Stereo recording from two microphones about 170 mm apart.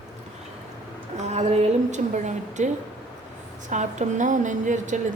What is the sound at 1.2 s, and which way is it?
A woman's voice, 40° right (ahead or behind).